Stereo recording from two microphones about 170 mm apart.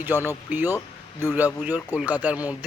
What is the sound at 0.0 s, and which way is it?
Speech, 10° right (ahead or behind).